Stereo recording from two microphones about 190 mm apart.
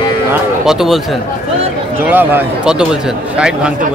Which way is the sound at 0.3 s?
5° right (ahead or behind).